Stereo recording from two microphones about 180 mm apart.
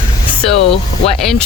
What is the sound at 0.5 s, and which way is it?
Speech, 35° left (ahead or behind).